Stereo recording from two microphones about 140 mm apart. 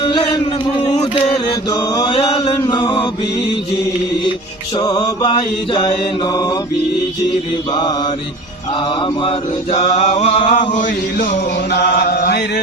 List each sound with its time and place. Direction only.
0.0 s a sound: 35° left (ahead or behind)
1.7 s mantra: 30° left (ahead or behind)
2.1 s chant: 40° left (ahead or behind)
2.6 s mantra: 30° left (ahead or behind)
4.8 s mantra: 30° left (ahead or behind)
9.9 s chant: 45° left (ahead or behind); by 11.3 s 65° left (ahead or behind)
12.0 s chant: 90° left